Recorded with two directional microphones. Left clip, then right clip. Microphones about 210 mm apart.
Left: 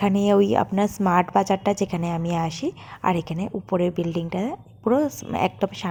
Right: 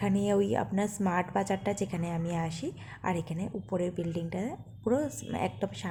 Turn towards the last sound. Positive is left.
turn(degrees=20)  # may be behind; listen again after turning